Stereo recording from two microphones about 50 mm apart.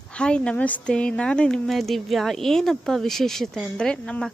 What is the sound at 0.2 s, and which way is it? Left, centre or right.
Speech, centre.